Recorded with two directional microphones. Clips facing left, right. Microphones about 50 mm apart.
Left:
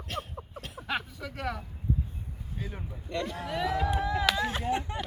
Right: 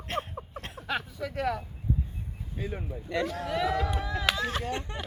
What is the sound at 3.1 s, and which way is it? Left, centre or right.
Speech, right.